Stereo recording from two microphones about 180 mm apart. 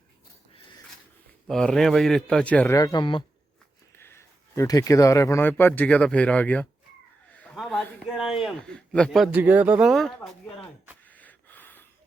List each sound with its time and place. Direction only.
1.5 s speech: centre (ahead or behind)
2.7 s speech: 20° left (ahead or behind)
3.9 s speech: 15° left (ahead or behind)
9.3 s speech: 10° right (ahead or behind)
11.1 s a sound: 10° left (ahead or behind)